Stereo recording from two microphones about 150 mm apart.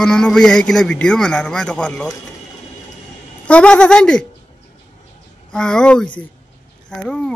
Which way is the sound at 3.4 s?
5° left (ahead or behind).